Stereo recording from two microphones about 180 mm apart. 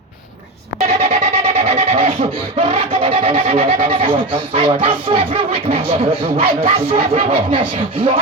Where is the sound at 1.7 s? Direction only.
35° right (ahead or behind).